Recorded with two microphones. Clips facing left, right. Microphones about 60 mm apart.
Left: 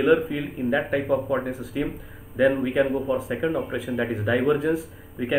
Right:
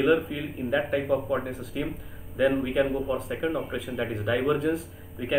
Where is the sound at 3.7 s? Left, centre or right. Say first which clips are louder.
Left 4 dB; centre.